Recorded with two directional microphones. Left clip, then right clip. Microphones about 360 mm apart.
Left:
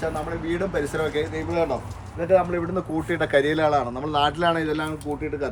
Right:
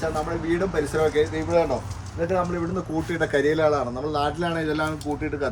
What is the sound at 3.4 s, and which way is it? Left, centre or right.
Speech, left.